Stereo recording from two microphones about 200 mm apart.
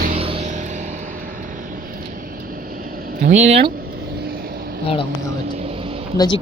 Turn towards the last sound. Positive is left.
turn(degrees=20)  # may be behind; listen again after turning